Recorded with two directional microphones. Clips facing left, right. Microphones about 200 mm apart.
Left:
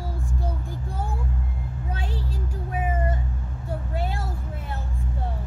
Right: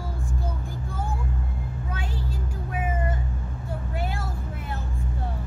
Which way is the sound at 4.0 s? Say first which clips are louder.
Left 1 dB; 30° left (ahead or behind).